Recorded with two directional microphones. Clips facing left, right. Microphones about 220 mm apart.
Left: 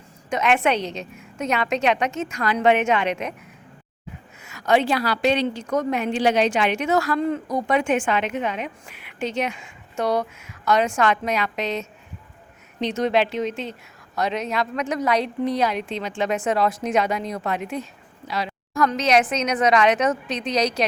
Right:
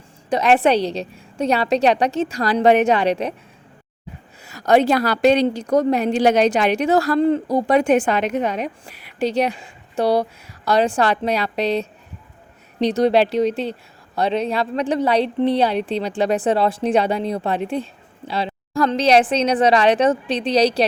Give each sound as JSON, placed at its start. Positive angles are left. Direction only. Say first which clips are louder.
{"t": 0.3, "sound": "a woman's voice", "louder": "right 5 dB", "side_deg": -35}
{"t": 4.4, "sound": "a woman's voice", "louder": "right 4 dB", "side_deg": -40}